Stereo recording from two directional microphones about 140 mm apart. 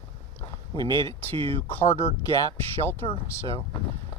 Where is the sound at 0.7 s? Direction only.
20° left (ahead or behind).